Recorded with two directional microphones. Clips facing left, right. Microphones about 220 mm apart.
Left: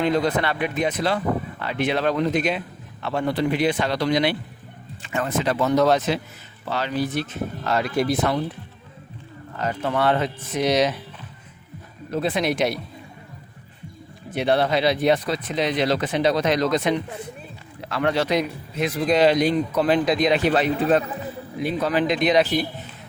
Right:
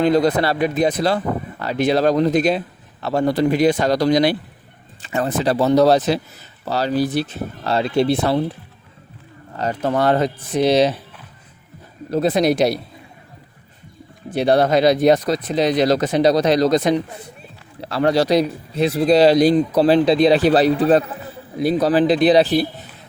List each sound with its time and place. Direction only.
0.0 s speech: 35° right (ahead or behind)
9.6 s speech: 35° right (ahead or behind)
12.1 s speech: 40° right (ahead or behind)
14.3 s speech: 35° right (ahead or behind)